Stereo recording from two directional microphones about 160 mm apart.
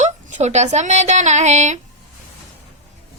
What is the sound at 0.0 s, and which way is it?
Speech, 50° right (ahead or behind).